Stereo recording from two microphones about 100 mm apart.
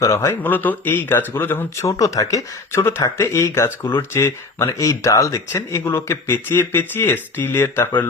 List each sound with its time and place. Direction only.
0.0 s speech: 30° left (ahead or behind)
1.9 s speech: 35° left (ahead or behind)